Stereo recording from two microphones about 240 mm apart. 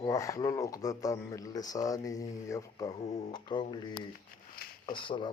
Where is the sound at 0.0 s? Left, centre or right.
Centre.